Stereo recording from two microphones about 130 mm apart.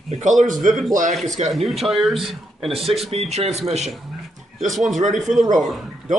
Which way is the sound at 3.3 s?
55° right (ahead or behind).